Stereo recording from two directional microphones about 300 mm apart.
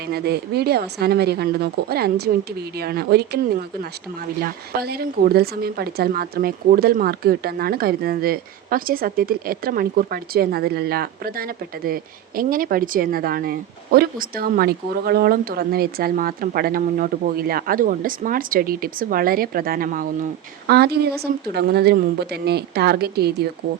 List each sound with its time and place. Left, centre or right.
0.1 s a woman's voice: right